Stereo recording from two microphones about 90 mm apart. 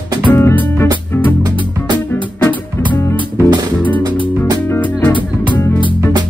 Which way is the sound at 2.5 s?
60° right (ahead or behind).